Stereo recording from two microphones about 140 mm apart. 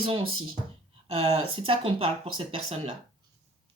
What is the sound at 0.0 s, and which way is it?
Speech, 35° right (ahead or behind).